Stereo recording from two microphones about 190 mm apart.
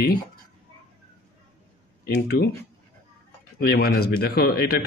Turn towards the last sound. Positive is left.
turn(degrees=55)  # may be behind; listen again after turning